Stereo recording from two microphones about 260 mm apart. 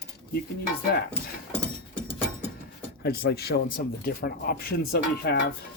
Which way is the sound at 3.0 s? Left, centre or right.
Left.